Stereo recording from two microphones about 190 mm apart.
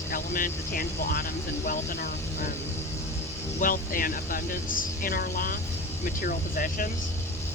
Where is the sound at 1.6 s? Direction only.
40° left (ahead or behind).